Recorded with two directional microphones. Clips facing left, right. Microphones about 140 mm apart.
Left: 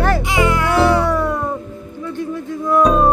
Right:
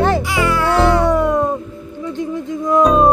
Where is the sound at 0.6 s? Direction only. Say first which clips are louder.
Right 3 dB; 20° right (ahead or behind).